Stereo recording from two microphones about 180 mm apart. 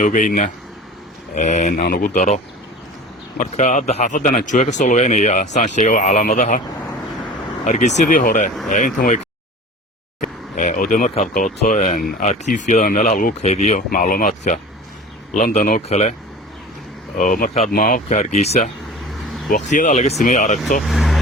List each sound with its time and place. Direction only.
0.0 s a man's voice: 45° left (ahead or behind)
7.6 s a man's voice: 40° left (ahead or behind)
10.2 s a sound: 45° left (ahead or behind)
11.1 s a man's voice: 45° left (ahead or behind)
15.9 s speech: 35° left (ahead or behind)
17.2 s a man's voice: 50° left (ahead or behind)
19.7 s a man's voice: 40° left (ahead or behind)
20.8 s vehicle: centre (ahead or behind)